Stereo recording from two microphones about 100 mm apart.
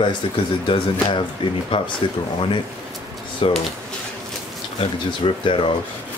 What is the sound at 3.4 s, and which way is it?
Speech, 65° left (ahead or behind).